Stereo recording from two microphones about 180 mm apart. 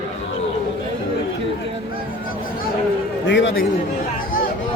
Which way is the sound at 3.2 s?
90° left.